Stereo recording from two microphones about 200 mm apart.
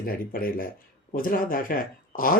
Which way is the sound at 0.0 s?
45° left (ahead or behind).